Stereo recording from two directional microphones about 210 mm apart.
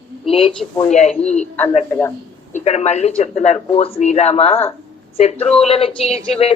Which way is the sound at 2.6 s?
30° left (ahead or behind).